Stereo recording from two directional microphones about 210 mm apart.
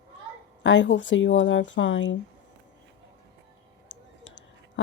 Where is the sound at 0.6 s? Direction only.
60° left (ahead or behind).